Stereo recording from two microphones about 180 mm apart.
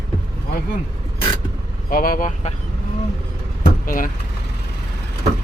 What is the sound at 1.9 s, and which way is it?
Speech, 50° left (ahead or behind).